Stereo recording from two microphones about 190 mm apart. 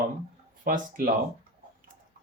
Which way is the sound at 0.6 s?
50° right (ahead or behind).